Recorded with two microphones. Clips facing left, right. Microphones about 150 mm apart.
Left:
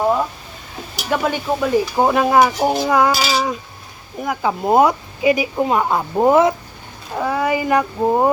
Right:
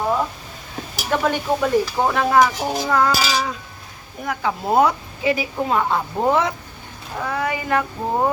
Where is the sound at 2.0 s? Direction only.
15° left (ahead or behind).